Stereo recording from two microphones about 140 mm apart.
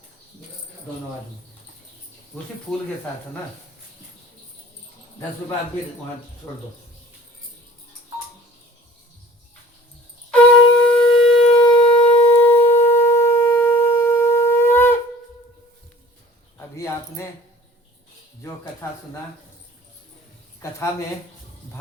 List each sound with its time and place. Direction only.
10.3 s shofar: 10° left (ahead or behind)
16.7 s keys jangling: 20° left (ahead or behind)
20.6 s a woman's voice: 20° left (ahead or behind)